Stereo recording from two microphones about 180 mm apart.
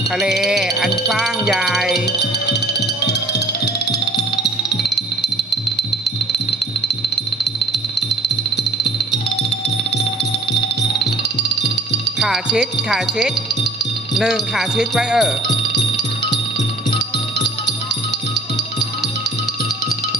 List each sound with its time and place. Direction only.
0.2 s speech: centre (ahead or behind)
2.0 s music: 70° left (ahead or behind)
12.2 s speech: 5° right (ahead or behind)